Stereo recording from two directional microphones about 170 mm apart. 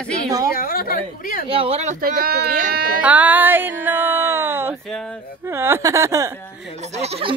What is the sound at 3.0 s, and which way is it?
Speech, 10° right (ahead or behind).